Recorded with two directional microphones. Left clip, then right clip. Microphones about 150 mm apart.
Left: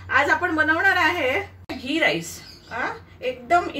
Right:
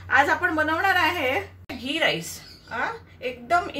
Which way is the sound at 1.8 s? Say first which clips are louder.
Left 2 dB; 20° right (ahead or behind).